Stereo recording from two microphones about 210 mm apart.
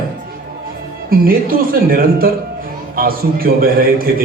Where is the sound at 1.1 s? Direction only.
45° right (ahead or behind).